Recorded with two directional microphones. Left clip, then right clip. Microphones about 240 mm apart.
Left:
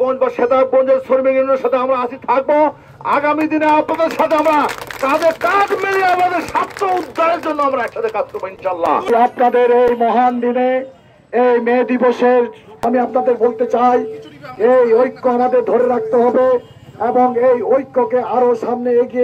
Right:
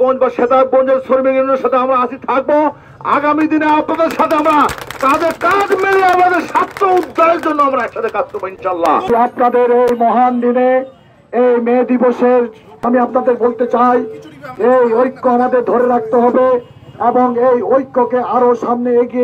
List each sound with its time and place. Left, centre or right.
0.0 s speech: right